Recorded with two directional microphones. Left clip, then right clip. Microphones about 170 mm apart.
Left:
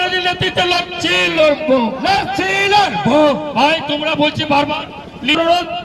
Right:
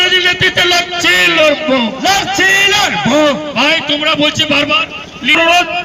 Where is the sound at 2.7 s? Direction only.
25° right (ahead or behind).